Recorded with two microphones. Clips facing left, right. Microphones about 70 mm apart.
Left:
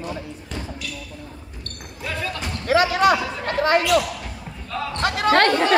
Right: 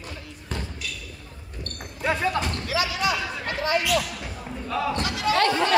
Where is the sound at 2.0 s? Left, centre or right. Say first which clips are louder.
Right 5 dB; right.